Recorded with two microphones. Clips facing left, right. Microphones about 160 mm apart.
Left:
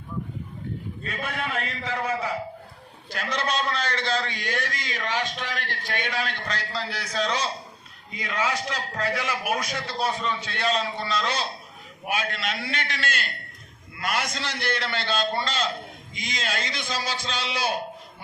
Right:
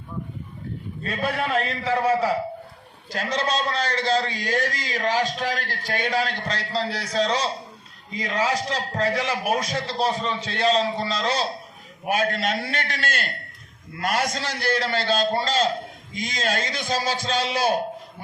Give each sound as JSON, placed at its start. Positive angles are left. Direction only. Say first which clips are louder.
{"t": 1.0, "sound": "a man's voice", "louder": "right 6 dB", "side_deg": -35}